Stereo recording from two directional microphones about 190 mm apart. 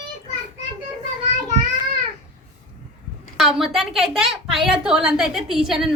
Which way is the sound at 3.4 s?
Centre (ahead or behind).